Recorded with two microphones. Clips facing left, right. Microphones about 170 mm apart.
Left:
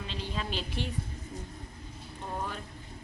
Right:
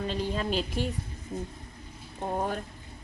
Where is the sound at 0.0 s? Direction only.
45° right (ahead or behind).